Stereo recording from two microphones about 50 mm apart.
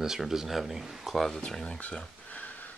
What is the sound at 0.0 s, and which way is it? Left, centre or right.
Speech, centre.